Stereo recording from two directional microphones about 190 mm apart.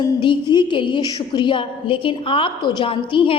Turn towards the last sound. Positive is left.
turn(degrees=25)  # may be behind; listen again after turning